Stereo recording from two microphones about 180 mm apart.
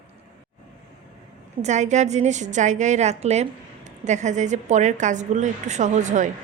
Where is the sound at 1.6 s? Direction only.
40° right (ahead or behind).